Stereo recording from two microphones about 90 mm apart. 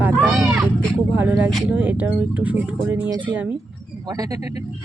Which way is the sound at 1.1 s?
20° right (ahead or behind).